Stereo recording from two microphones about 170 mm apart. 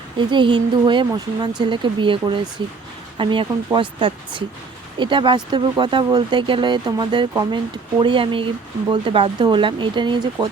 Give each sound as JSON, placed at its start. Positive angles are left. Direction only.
{"t": 0.2, "sound": "speech", "side_deg": -30}